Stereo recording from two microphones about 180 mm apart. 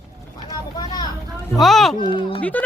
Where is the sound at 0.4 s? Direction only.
20° left (ahead or behind).